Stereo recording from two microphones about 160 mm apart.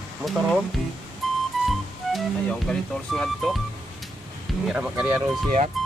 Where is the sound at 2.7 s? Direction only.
Centre (ahead or behind).